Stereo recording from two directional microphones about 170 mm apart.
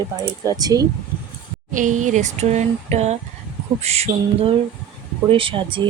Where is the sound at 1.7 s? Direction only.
50° right (ahead or behind).